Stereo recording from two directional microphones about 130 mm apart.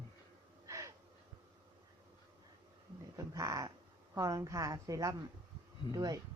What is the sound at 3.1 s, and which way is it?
A woman's voice, 25° right (ahead or behind).